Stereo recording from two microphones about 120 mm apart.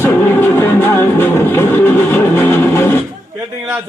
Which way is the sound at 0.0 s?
15° left (ahead or behind).